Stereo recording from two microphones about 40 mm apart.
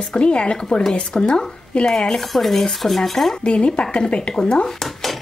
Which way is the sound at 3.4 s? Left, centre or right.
Left.